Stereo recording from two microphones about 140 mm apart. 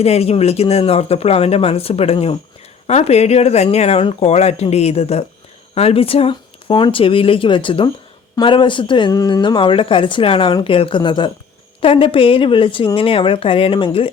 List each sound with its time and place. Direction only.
0.0 s a woman's voice: 50° left (ahead or behind)